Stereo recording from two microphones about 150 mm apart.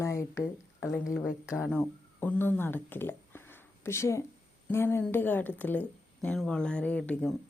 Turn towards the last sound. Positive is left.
turn(degrees=10)  # may be behind; listen again after turning